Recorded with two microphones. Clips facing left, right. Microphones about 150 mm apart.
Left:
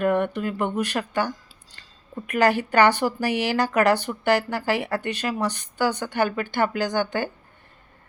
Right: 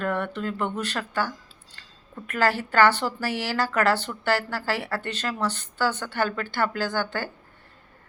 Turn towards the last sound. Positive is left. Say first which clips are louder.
# left 3 dB
turn(degrees=15)  # may be behind; listen again after turning